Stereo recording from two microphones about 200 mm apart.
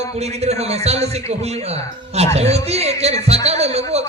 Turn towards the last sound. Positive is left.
turn(degrees=-30)  # may be behind; listen again after turning